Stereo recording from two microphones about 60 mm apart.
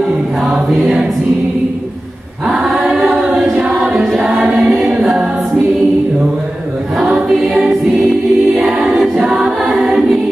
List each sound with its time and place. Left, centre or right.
2.4 s choir: centre
3.5 s choir: centre
8.5 s choir: centre
9.1 s choir: centre